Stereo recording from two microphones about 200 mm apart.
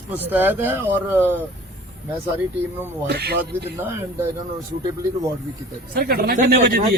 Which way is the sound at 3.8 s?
10° right (ahead or behind).